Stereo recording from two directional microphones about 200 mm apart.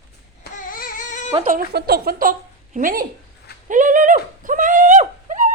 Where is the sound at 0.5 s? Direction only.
45° left (ahead or behind).